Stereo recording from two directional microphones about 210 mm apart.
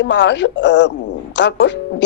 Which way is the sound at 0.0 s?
60° left (ahead or behind).